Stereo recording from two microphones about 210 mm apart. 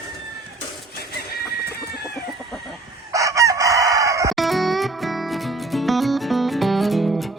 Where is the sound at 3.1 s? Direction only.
15° right (ahead or behind).